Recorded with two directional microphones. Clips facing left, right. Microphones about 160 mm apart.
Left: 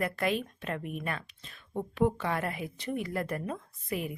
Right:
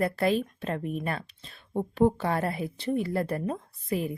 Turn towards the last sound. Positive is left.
turn(degrees=-35)  # may be behind; listen again after turning